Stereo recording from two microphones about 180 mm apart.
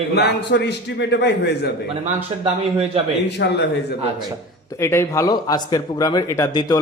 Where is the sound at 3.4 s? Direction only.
70° left (ahead or behind).